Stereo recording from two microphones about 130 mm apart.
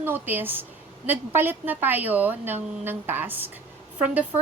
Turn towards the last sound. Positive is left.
turn(degrees=-10)  # may be behind; listen again after turning